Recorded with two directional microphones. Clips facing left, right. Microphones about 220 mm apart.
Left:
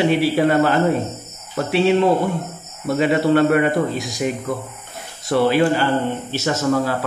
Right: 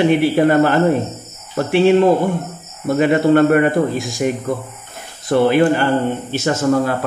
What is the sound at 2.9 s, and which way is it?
A man's voice, 50° right (ahead or behind).